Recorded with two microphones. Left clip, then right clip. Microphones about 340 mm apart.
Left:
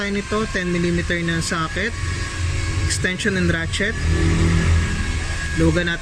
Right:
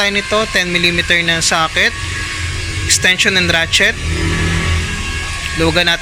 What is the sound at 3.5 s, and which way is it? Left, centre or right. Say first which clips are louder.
Speech: right 10 dB; right.